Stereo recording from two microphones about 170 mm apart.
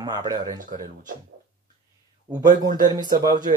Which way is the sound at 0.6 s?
50° right (ahead or behind).